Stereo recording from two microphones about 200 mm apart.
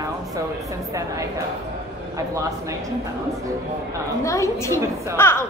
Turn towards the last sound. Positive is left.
turn(degrees=10)  # may be behind; listen again after turning